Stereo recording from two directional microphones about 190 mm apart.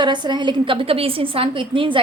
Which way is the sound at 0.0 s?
25° right (ahead or behind).